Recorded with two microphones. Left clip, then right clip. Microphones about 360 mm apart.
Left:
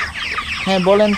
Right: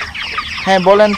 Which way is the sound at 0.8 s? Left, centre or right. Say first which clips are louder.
Right 4 dB; right.